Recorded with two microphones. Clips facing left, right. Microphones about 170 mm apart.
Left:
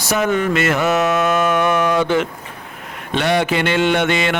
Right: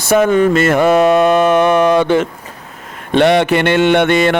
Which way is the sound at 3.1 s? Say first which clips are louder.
Right 7 dB; 60° right (ahead or behind).